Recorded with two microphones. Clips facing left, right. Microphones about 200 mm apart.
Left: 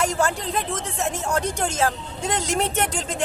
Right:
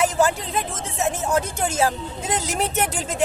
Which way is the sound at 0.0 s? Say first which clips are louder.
Right 3 dB; 5° right (ahead or behind).